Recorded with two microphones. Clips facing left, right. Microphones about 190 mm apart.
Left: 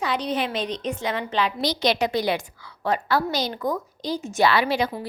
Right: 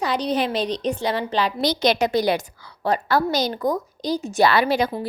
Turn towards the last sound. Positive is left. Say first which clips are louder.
# right 2 dB
turn(degrees=-40)  # may be behind; listen again after turning